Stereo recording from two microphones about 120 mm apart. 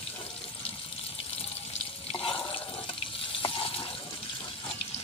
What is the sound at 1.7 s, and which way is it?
Water tap, 50° left (ahead or behind).